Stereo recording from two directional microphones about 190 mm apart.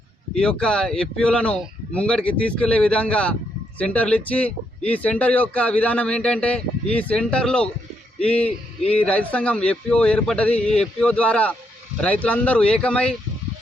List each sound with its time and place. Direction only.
0.3 s speech: 5° left (ahead or behind)